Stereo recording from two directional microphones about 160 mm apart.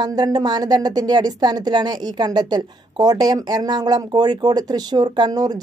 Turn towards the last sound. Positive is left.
turn(degrees=-25)  # may be behind; listen again after turning